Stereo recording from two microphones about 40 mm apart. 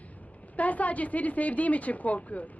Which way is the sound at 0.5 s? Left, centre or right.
Left.